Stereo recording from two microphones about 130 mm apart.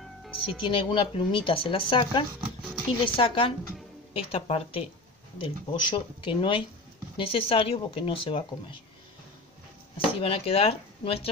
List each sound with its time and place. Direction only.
0.6 s speech: 40° left (ahead or behind)
9.9 s speech: 45° left (ahead or behind)